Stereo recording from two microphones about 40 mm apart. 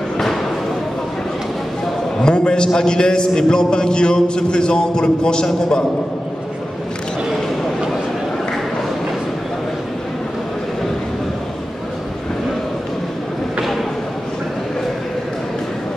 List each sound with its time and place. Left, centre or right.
2.2 s a man's voice: left